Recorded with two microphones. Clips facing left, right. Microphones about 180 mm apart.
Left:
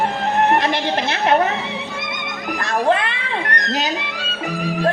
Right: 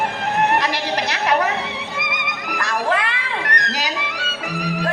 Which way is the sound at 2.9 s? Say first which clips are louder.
Left 3 dB; 25° left (ahead or behind).